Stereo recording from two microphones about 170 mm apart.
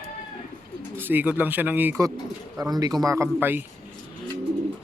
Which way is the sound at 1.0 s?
10° right (ahead or behind).